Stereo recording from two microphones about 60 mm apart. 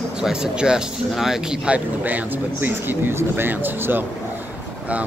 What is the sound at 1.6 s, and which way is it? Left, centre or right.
A man's voice, right.